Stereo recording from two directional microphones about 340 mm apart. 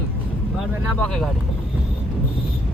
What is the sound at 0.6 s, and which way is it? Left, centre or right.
Speech, centre.